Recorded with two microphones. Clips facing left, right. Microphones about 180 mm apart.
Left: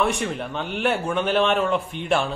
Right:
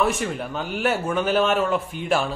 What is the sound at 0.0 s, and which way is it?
A man's voice, centre (ahead or behind).